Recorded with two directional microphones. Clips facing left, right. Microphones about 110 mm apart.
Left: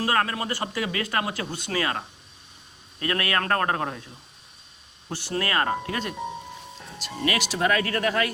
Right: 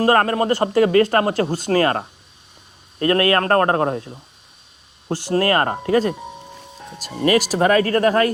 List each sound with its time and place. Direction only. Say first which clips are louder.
0.0 s speech: right 9 dB; 45° right (ahead or behind)